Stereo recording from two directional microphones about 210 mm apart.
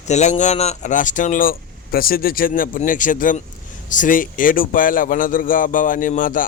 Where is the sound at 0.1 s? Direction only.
35° left (ahead or behind).